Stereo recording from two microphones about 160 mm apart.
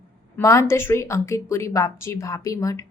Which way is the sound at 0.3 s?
20° left (ahead or behind).